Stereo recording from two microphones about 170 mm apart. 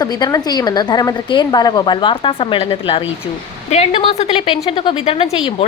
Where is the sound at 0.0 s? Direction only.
20° left (ahead or behind).